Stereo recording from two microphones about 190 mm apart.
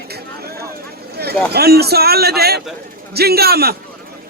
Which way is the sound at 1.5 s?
55° right (ahead or behind).